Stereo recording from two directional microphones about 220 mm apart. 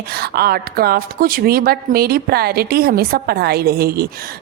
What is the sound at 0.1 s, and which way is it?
A woman's voice, 45° right (ahead or behind).